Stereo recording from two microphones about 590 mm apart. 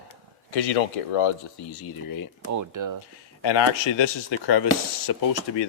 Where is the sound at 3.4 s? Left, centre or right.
Left.